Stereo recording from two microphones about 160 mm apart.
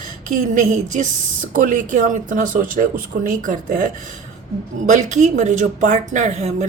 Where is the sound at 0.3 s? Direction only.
50° right (ahead or behind).